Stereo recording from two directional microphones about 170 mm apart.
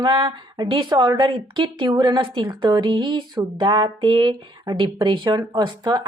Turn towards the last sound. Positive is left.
turn(degrees=-25)  # may be behind; listen again after turning